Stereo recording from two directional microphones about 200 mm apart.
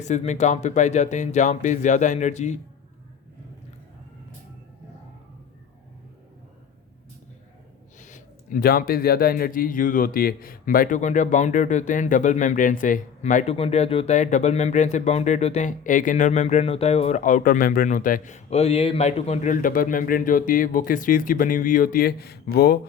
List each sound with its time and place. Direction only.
0.0 s speech: 35° left (ahead or behind)
7.9 s speech: 40° left (ahead or behind)